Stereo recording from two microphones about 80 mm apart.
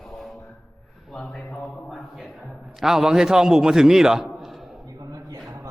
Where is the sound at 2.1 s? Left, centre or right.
Centre.